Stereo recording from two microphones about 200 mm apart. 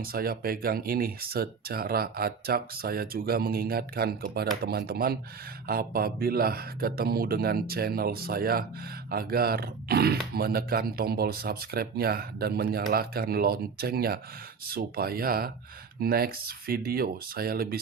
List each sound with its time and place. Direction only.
0.0 s speech: 50° right (ahead or behind)